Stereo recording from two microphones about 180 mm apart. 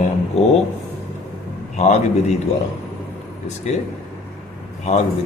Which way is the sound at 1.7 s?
40° left (ahead or behind).